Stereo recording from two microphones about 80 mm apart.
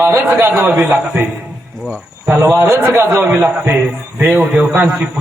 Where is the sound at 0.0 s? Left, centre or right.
Right.